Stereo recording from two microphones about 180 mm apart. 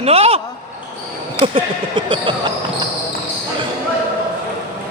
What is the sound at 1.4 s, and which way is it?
Speech, 30° right (ahead or behind).